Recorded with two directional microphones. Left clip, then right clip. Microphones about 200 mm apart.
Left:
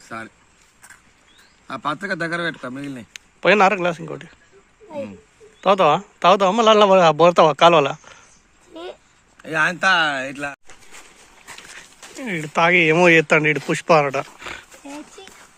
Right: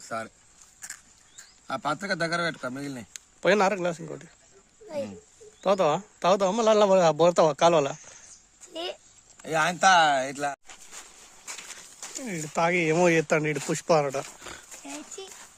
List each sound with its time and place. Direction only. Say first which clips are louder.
1.6 s a man's voice: left 4 dB; 70° right (ahead or behind)
3.1 s speech: left 7 dB; 10° right (ahead or behind)
5.5 s a man's voice: left 8 dB; 5° right (ahead or behind)
8.7 s a sound: even; 20° right (ahead or behind)
9.4 s a man's voice: left 4 dB; 70° right (ahead or behind)
12.1 s a man's voice: left 8 dB; centre (ahead or behind)
13.7 s wild animals: left 8 dB; 5° right (ahead or behind)